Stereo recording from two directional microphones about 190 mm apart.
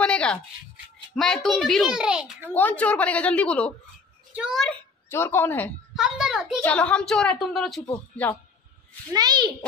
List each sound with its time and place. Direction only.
0.0 s a sound: 5° left (ahead or behind)
1.1 s a child's voice: centre (ahead or behind)
2.5 s a woman's voice: 10° left (ahead or behind)
5.1 s a woman's voice: 10° left (ahead or behind)
5.9 s a child's voice: 5° right (ahead or behind)
9.1 s a child's voice: 20° right (ahead or behind)